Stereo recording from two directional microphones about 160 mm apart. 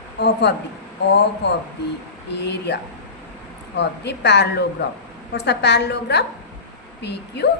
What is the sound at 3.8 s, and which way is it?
A woman's voice, 90° left.